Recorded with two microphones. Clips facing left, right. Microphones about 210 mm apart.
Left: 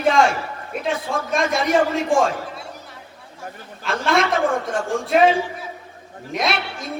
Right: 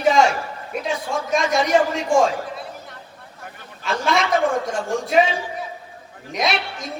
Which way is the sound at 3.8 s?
Centre (ahead or behind).